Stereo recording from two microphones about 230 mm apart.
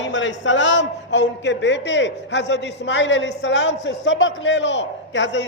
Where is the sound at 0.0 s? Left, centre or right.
Left.